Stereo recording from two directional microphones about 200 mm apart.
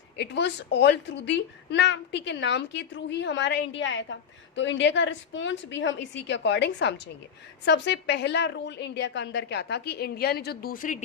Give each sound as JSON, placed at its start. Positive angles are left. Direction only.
{"t": 0.2, "sound": "speech", "side_deg": 60}